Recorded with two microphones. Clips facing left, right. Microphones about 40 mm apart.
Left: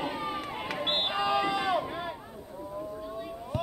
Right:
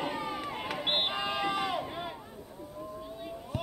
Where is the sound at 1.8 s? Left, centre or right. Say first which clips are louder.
Left 2 dB; centre.